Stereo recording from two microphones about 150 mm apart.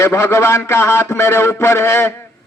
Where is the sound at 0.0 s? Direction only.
15° left (ahead or behind).